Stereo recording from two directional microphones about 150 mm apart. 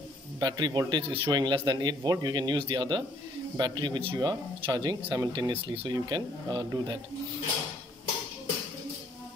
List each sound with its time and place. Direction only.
0.4 s speech: 30° right (ahead or behind)